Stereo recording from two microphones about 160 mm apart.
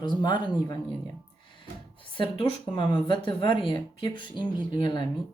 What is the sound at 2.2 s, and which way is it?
Speech, 35° left (ahead or behind).